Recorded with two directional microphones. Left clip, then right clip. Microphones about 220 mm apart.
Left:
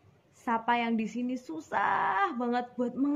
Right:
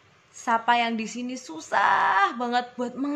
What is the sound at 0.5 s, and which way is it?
Speech, 40° right (ahead or behind).